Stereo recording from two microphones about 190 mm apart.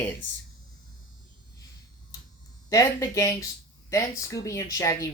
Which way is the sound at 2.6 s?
20° left (ahead or behind).